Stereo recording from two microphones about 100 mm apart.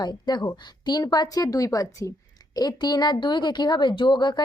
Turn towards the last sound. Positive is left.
turn(degrees=50)  # may be behind; listen again after turning